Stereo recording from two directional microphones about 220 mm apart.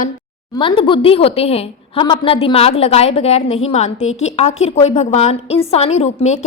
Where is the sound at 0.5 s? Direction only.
20° left (ahead or behind).